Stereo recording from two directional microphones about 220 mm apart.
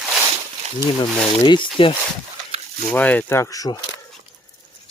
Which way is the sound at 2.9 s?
5° left (ahead or behind).